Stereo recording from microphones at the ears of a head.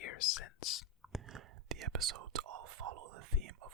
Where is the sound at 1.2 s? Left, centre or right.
Right.